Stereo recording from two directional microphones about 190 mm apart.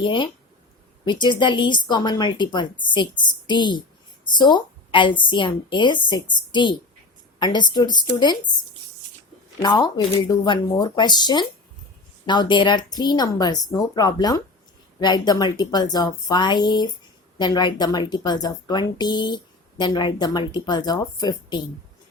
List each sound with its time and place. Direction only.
0.0 s speech: 25° left (ahead or behind)
9.6 s a woman's voice: 20° left (ahead or behind)